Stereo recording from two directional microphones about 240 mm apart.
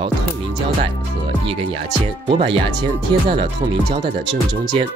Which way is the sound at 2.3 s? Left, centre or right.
Right.